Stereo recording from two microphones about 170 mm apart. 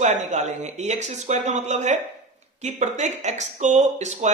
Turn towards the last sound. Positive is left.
turn(degrees=-40)  # may be behind; listen again after turning